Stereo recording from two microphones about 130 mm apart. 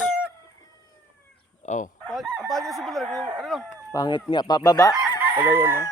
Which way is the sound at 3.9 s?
35° left (ahead or behind).